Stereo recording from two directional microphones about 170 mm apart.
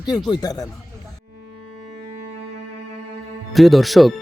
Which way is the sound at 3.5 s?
Centre (ahead or behind).